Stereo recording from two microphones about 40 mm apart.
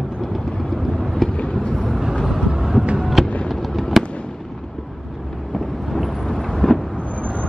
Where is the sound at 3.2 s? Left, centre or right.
Left.